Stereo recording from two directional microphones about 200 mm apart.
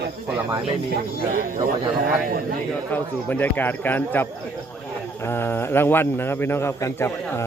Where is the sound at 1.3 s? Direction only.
45° right (ahead or behind).